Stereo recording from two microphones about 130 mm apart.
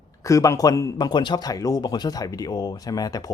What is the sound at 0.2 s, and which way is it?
A man's voice, 25° left (ahead or behind).